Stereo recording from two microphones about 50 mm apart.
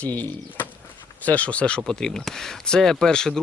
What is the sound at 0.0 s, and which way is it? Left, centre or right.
Speech, left.